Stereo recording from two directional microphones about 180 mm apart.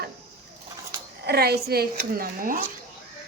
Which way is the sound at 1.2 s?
65° right (ahead or behind).